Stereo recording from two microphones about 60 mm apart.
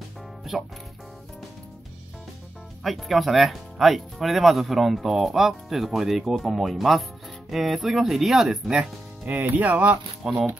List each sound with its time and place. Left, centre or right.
2.8 s speech: centre
9.3 s speech: right
10.2 s speech: centre